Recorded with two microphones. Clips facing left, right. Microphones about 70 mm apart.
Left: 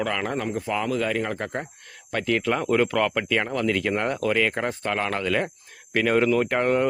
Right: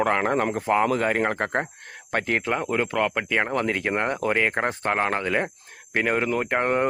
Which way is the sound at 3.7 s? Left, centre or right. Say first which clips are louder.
Even; right.